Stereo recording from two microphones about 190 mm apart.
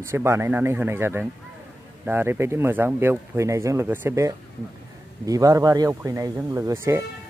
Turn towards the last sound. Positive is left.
turn(degrees=-15)  # may be behind; listen again after turning